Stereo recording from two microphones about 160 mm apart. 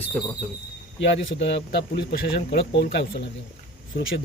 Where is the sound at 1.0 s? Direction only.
90° left.